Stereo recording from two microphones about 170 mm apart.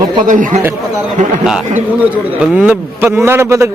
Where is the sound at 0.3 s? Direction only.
50° right (ahead or behind).